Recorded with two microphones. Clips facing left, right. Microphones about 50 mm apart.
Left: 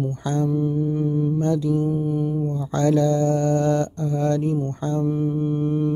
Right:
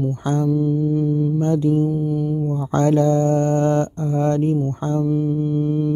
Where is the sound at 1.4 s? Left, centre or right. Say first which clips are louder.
Right 5 dB; right.